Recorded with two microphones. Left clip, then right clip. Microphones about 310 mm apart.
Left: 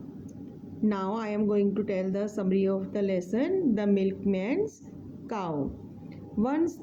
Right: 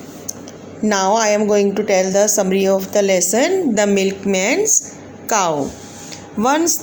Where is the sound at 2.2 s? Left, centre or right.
Left.